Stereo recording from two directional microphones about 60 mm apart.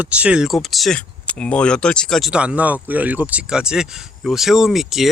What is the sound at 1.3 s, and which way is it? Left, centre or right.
Speech, centre.